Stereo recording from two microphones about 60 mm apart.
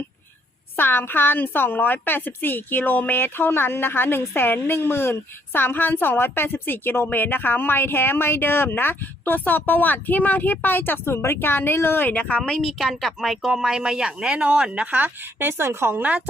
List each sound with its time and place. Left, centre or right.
0.8 s a woman's voice: left
12.6 s speech: centre; by 16.0 s right
16.0 s a woman's voice: right